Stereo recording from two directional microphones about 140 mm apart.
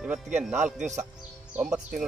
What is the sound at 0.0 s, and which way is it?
Speech, 10° right (ahead or behind).